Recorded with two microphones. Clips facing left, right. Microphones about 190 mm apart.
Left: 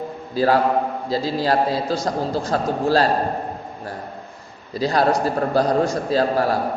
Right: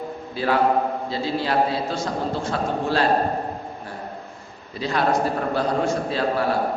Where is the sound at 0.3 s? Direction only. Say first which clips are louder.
Left 3 dB; 40° left (ahead or behind).